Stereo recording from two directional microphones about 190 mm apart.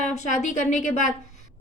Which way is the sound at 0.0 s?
40° left (ahead or behind).